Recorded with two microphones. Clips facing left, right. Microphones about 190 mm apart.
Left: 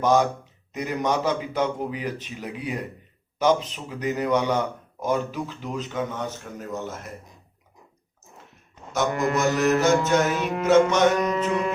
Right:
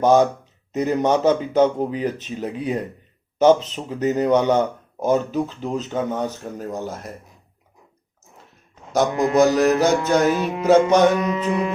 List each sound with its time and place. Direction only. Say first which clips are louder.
0.0 s a man's voice: right 5 dB; 30° right (ahead or behind)
8.9 s speech: right 5 dB; 35° right (ahead or behind)
11.2 s music: right 2 dB; 5° right (ahead or behind)